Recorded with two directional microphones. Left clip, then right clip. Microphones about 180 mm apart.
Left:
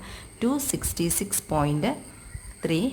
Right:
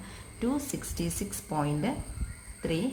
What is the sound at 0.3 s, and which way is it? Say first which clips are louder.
Speech: left 5 dB; 40° left (ahead or behind).